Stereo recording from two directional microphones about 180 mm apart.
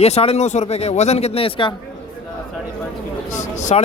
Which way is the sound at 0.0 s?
35° left (ahead or behind).